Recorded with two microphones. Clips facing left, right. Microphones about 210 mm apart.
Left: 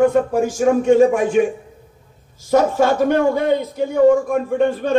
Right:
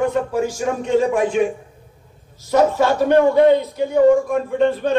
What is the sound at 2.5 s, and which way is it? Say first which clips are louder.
A man's voice: left 1 dB; 50° left (ahead or behind).